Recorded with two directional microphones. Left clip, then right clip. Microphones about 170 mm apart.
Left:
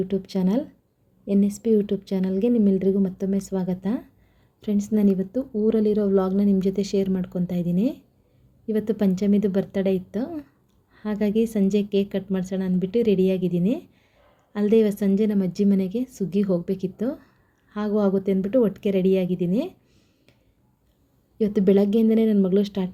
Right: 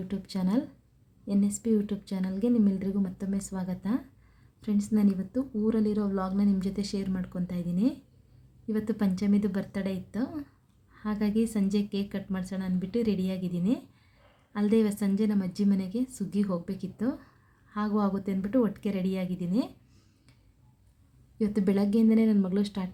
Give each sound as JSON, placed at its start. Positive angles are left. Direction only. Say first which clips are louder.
{"t": 0.1, "sound": "a woman's voice", "louder": "left 7 dB", "side_deg": 15}
{"t": 21.3, "sound": "a woman's voice", "louder": "left 9 dB", "side_deg": 10}